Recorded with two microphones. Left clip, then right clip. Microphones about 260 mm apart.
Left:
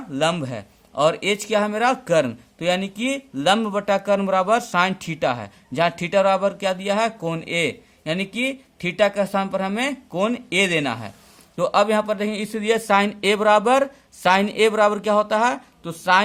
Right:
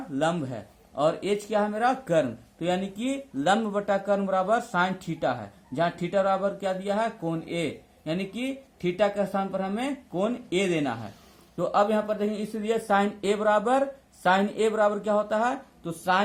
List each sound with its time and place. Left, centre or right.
0.2 s speech: left